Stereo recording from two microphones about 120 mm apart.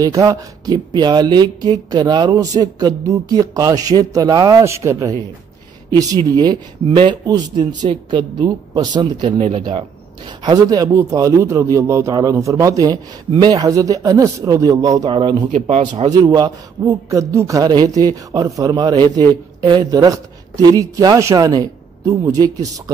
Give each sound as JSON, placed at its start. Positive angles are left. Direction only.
{"t": 0.0, "sound": "a man's voice", "side_deg": -30}